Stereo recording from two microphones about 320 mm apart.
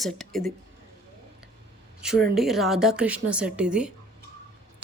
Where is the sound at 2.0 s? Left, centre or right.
Centre.